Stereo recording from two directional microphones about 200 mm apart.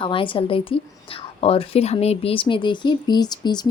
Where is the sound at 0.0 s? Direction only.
25° left (ahead or behind).